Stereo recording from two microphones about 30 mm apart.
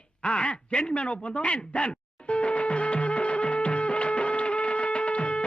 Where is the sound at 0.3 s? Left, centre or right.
Left.